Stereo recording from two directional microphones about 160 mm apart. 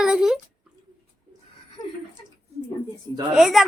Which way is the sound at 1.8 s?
25° left (ahead or behind).